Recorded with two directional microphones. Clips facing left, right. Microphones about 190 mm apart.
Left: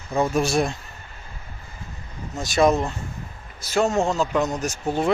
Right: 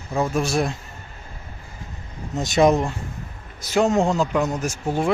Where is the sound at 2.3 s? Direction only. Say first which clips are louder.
Right 2 dB; 20° right (ahead or behind).